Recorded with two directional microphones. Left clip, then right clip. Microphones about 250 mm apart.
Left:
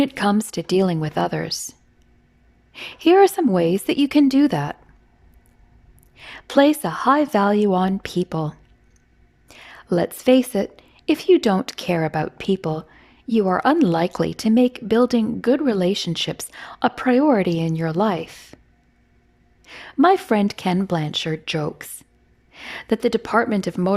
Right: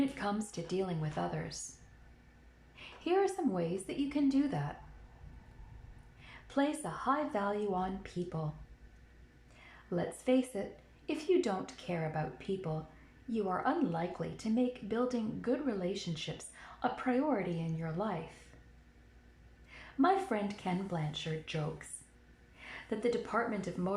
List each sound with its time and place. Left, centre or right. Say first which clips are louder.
0.1 s speech: left 16 dB; left
2.7 s speech: left 18 dB; left
6.2 s speech: left 18 dB; left
9.5 s a woman's voice: left 17 dB; left
18.5 s a sound: left 14 dB; left
19.6 s speech: left 14 dB; left